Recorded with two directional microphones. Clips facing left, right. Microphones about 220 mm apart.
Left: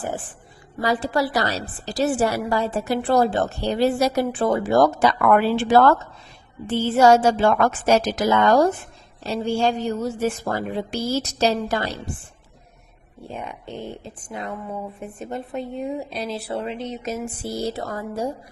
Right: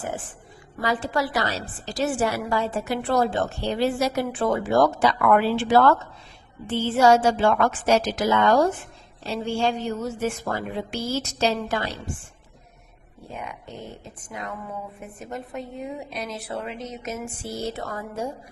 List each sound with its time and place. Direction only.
0.8 s a woman's voice: 35° left (ahead or behind)
13.2 s a woman's voice: 30° left (ahead or behind)